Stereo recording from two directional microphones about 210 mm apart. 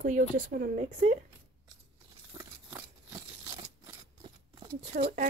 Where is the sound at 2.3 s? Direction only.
15° right (ahead or behind).